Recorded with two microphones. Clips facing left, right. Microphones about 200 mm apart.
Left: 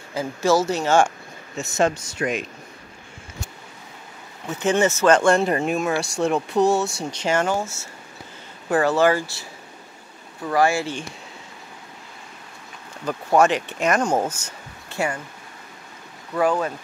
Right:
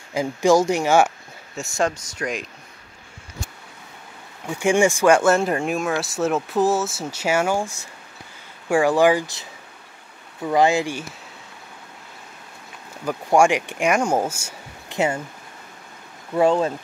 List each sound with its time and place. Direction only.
0.1 s speech: 15° right (ahead or behind)
2.2 s speech: 15° left (ahead or behind)
4.5 s speech: 10° right (ahead or behind)
10.5 s speech: 20° right (ahead or behind)
13.0 s speech: 10° right (ahead or behind)
15.0 s speech: 25° right (ahead or behind)
16.3 s speech: 25° right (ahead or behind)